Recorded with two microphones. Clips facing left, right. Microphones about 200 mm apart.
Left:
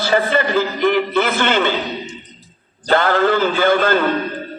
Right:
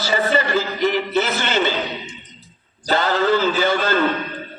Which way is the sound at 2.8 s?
55° left (ahead or behind).